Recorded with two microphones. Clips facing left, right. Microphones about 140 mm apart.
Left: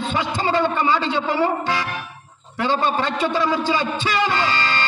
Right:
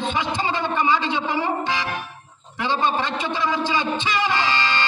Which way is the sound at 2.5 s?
45° left (ahead or behind).